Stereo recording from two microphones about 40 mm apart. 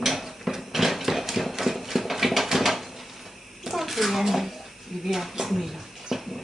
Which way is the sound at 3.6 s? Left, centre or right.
Centre.